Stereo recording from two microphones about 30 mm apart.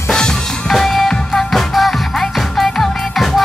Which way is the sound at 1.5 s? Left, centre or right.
Centre.